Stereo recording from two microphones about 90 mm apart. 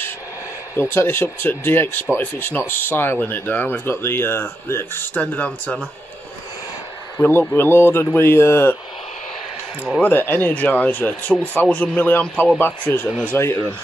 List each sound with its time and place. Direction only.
0.7 s speech: 25° left (ahead or behind)
7.2 s speech: 25° left (ahead or behind)
10.0 s speech: 25° left (ahead or behind)